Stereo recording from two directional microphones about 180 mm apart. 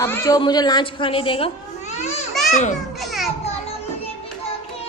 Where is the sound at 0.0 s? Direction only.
15° left (ahead or behind).